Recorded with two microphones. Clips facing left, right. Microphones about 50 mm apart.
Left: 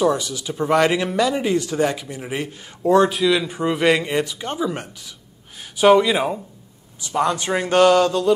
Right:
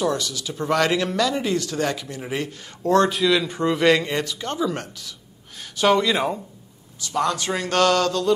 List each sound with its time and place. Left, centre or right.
0.0 s a man's voice: centre
7.0 s a man's voice: centre